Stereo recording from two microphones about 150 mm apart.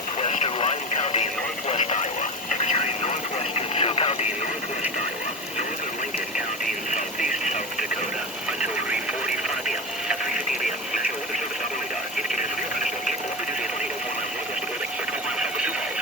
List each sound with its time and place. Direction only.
0.2 s vehicle: 45° left (ahead or behind)
2.5 s radio: 50° left (ahead or behind)
6.9 s a sound: 55° left (ahead or behind)
15.4 s radio: 5° right (ahead or behind)